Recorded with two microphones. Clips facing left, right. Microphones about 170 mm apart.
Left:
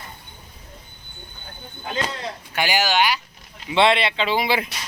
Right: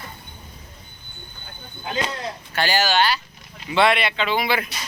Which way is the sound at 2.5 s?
15° left (ahead or behind).